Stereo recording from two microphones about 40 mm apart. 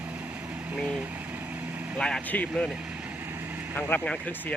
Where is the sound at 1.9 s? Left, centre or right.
Left.